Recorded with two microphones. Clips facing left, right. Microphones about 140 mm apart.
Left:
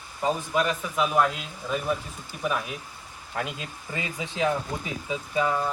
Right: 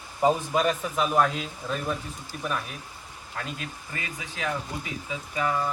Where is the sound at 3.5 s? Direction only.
20° left (ahead or behind).